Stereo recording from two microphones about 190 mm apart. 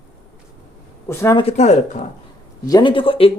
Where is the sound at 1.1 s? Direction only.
15° left (ahead or behind).